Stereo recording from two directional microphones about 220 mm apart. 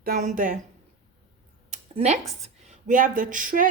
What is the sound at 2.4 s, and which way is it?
Speech, 30° right (ahead or behind).